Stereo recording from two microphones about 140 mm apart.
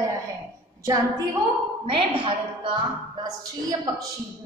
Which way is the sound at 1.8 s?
40° right (ahead or behind).